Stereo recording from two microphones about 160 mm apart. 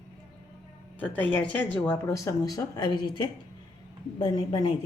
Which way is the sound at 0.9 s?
10° left (ahead or behind).